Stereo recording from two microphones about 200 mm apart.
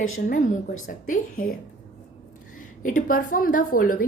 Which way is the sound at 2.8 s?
40° left (ahead or behind).